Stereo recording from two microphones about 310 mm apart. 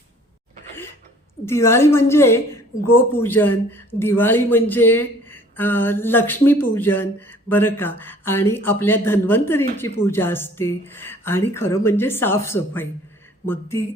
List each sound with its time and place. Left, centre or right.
1.5 s speech: centre